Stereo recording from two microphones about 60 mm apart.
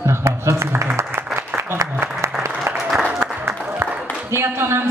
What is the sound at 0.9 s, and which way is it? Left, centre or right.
Applause, right.